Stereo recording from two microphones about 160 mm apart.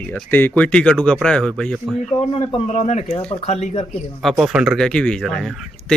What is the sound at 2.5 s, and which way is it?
Speech, 45° left (ahead or behind).